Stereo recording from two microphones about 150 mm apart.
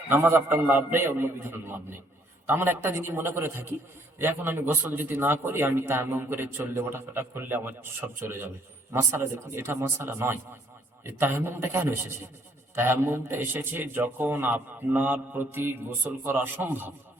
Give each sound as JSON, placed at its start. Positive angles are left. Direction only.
{"t": 0.1, "sound": "a man's voice", "side_deg": -15}